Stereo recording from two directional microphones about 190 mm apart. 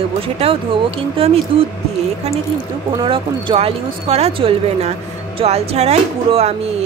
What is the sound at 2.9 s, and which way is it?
Speech, 25° right (ahead or behind).